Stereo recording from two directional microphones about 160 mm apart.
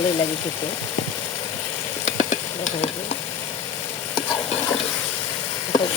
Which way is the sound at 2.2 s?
50° left (ahead or behind).